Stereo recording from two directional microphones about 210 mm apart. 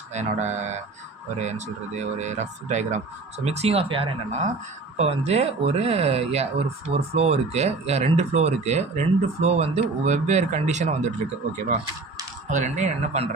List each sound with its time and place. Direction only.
0.1 s speech: 35° right (ahead or behind)
12.5 s speech: 35° right (ahead or behind)